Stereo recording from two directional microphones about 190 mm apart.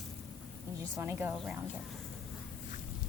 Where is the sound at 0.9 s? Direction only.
10° right (ahead or behind).